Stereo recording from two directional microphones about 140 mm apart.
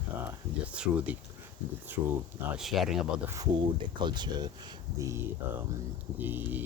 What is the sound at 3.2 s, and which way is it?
Speech, 20° right (ahead or behind).